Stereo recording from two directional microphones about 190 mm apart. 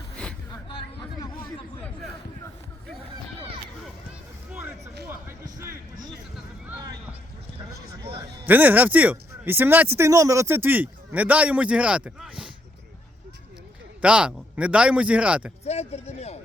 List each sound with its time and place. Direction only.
5.5 s a sound: 15° right (ahead or behind)
8.4 s speech: 10° right (ahead or behind)
14.0 s speech: 5° right (ahead or behind)
15.6 s a man's voice: 35° left (ahead or behind)